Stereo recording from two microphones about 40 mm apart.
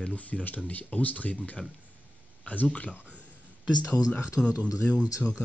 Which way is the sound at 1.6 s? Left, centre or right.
Centre.